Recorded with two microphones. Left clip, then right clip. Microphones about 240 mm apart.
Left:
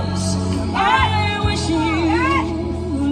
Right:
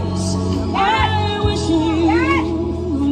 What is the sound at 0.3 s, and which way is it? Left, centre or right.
Music, left.